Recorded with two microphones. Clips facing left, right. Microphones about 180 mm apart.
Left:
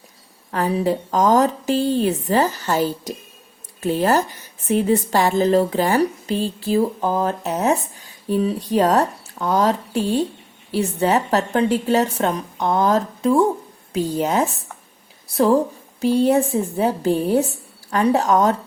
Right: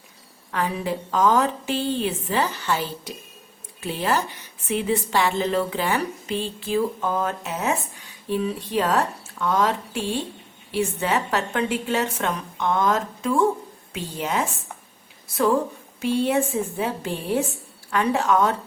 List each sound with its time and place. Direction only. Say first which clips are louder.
0.5 s a woman's voice: left 6 dB; 40° left (ahead or behind)